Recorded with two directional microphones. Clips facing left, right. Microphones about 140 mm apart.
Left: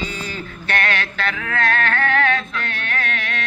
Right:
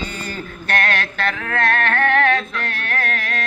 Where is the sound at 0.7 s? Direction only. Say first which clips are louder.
Right 1 dB; 45° right (ahead or behind).